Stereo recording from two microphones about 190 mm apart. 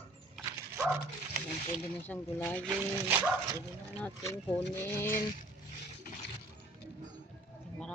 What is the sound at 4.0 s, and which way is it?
Speech, 10° left (ahead or behind).